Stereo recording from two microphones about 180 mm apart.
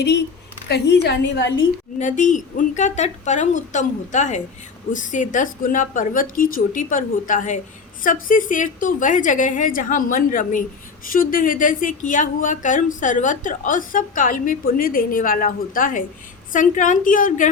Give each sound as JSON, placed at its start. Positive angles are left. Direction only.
{"t": 0.7, "sound": "a woman's voice", "side_deg": 65}
{"t": 2.0, "sound": "speech", "side_deg": 45}